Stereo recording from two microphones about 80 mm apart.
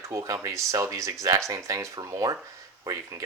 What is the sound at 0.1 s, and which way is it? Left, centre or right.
Speech, right.